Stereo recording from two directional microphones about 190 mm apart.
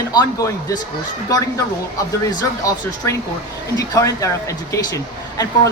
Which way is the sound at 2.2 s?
15° left (ahead or behind).